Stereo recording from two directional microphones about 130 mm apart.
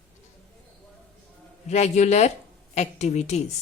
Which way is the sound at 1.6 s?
60° left (ahead or behind).